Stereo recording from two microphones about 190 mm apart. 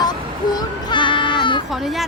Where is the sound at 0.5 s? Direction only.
25° left (ahead or behind).